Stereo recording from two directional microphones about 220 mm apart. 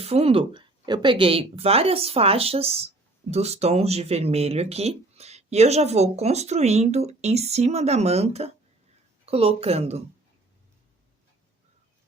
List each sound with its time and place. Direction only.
0.0 s a woman's voice: 25° right (ahead or behind)